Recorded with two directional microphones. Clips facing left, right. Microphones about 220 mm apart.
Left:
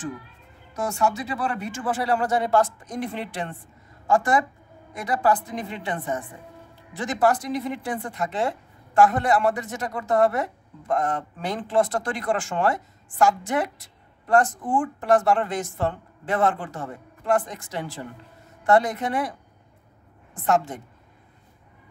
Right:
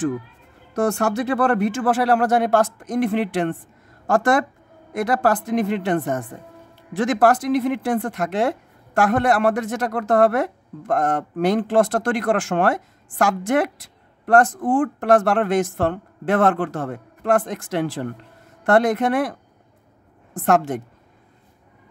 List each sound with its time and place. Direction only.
0.8 s speech: 60° right (ahead or behind)
4.1 s speech: 85° right; by 6.1 s 70° right (ahead or behind)
7.2 s speech: 80° right
20.4 s speech: 75° right (ahead or behind)